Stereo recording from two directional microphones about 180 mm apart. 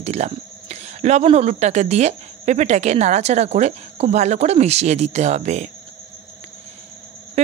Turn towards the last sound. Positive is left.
turn(degrees=-35)  # may be behind; listen again after turning